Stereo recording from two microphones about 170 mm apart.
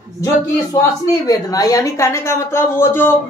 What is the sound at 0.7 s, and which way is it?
A woman's voice, 20° left (ahead or behind).